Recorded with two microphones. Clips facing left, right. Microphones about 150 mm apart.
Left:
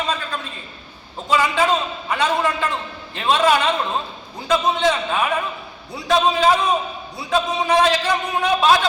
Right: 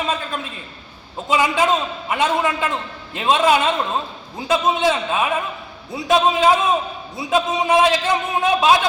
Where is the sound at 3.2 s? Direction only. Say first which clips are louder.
Right 1 dB; 20° right (ahead or behind).